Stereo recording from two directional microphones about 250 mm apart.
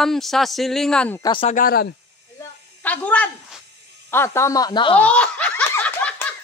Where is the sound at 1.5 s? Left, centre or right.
Left.